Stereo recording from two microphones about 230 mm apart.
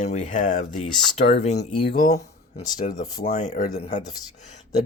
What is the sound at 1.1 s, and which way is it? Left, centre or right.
Speech, left.